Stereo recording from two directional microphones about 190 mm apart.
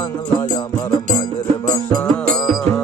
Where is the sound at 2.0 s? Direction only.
Centre (ahead or behind).